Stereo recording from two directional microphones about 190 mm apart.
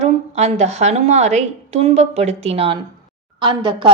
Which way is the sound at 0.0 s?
35° right (ahead or behind).